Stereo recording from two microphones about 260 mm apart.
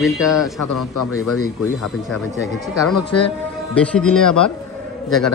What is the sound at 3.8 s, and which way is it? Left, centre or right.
Speech, centre.